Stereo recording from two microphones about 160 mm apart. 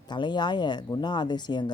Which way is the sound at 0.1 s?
30° left (ahead or behind).